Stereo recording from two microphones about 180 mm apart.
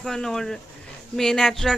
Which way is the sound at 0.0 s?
Centre (ahead or behind).